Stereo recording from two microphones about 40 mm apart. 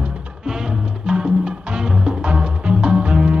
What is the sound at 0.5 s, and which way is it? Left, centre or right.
Music, centre.